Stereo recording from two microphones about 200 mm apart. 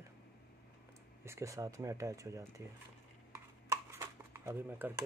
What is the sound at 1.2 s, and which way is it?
Speech, 15° right (ahead or behind).